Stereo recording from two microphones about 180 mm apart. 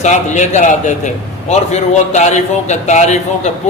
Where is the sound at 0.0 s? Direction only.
40° left (ahead or behind).